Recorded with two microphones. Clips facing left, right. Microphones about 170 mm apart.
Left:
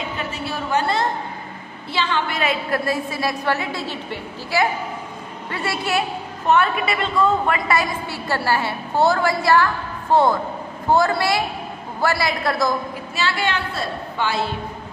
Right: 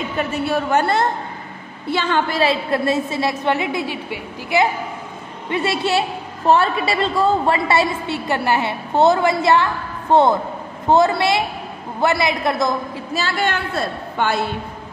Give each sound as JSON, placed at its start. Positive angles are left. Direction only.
{"t": 0.3, "sound": "a woman's voice", "side_deg": -55}
{"t": 2.3, "sound": "a woman's voice", "side_deg": -30}
{"t": 13.1, "sound": "a woman's voice", "side_deg": -45}